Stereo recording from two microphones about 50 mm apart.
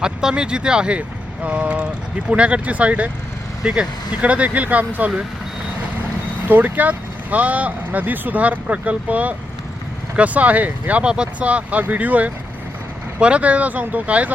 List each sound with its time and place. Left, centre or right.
0.0 s speech: centre
3.6 s speech: centre
4.2 s speech: right
6.5 s speech: right
11.0 s speech: centre